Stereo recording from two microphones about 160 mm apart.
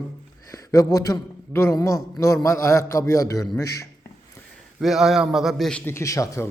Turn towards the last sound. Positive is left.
turn(degrees=20)  # may be behind; listen again after turning